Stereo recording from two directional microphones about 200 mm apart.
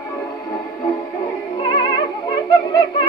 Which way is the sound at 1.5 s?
25° left (ahead or behind).